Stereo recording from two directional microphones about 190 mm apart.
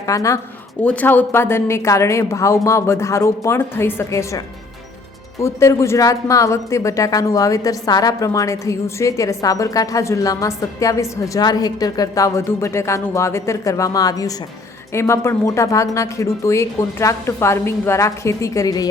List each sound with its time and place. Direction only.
0.0 s speech: 15° left (ahead or behind)